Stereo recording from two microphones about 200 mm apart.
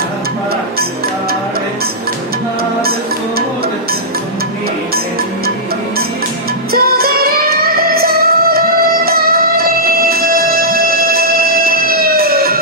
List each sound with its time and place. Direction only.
6.7 s music: 50° right (ahead or behind)